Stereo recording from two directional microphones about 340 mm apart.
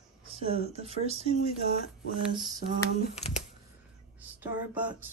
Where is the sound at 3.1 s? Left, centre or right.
Centre.